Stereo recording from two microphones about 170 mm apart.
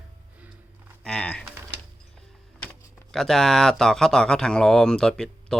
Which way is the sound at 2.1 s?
5° left (ahead or behind).